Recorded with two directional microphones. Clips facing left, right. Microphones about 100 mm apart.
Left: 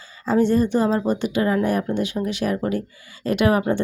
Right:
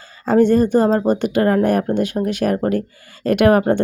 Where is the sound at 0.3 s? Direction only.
50° right (ahead or behind).